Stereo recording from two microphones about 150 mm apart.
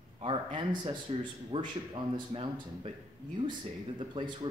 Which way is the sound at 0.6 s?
30° right (ahead or behind).